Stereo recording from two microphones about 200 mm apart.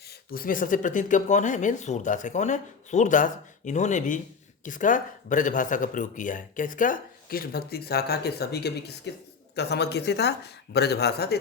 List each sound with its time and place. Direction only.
0.3 s speech: 45° left (ahead or behind)